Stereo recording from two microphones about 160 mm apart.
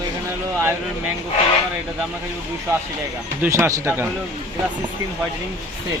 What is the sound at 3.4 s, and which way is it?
Speech, 15° right (ahead or behind).